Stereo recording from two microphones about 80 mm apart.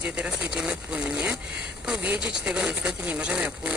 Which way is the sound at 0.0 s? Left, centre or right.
Centre.